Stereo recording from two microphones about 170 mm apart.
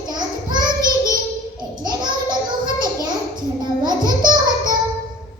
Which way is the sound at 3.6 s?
25° right (ahead or behind).